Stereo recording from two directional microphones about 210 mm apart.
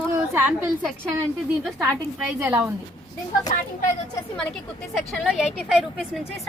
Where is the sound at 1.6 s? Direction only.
Centre (ahead or behind).